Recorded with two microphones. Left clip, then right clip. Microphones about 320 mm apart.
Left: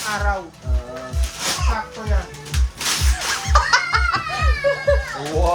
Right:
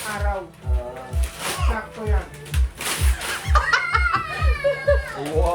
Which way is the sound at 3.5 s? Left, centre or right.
Centre.